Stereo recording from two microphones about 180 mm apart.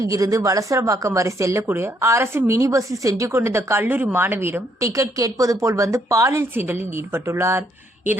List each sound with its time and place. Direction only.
0.0 s speech: 20° right (ahead or behind)